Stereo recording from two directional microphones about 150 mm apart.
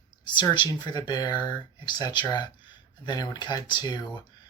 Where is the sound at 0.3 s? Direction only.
30° left (ahead or behind).